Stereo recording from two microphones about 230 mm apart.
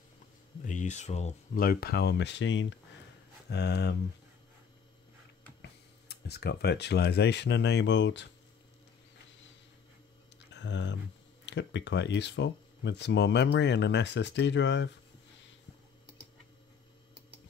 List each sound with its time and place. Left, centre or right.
0.7 s speech: left
5.6 s speech: left
10.5 s speech: left